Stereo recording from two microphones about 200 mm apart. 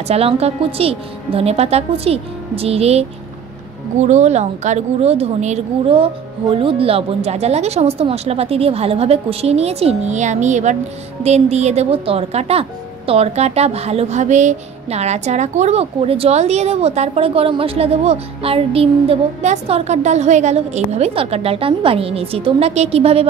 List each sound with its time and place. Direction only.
0.1 s speech: 30° right (ahead or behind)